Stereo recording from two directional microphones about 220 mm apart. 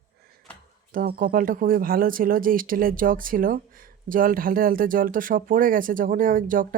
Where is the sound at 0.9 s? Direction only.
40° right (ahead or behind).